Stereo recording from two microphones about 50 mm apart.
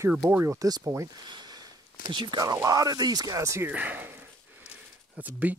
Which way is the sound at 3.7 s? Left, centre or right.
Right.